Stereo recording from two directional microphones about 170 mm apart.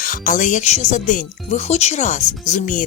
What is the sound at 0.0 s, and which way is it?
Speech, 50° left (ahead or behind).